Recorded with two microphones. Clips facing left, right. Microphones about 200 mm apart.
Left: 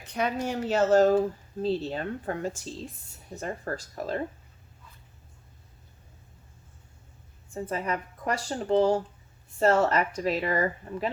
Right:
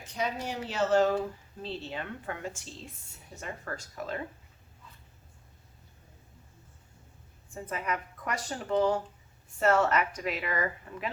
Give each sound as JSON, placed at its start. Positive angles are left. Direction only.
{"t": 0.0, "sound": "speech", "side_deg": 60}
{"t": 7.5, "sound": "speech", "side_deg": 30}